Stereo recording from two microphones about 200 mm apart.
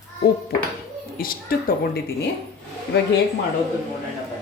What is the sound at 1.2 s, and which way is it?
Speech, 45° left (ahead or behind).